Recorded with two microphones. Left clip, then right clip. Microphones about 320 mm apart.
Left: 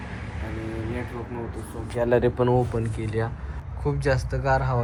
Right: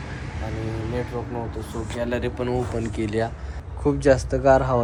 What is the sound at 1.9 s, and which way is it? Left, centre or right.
Speech, centre.